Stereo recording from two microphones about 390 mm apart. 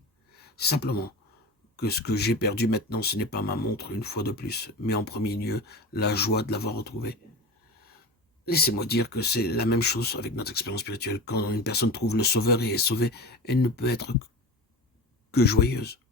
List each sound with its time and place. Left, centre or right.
0.5 s speech: left
8.4 s speech: left
15.3 s speech: left